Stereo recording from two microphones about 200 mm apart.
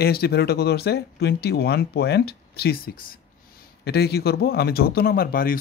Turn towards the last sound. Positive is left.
turn(degrees=45)  # may be behind; listen again after turning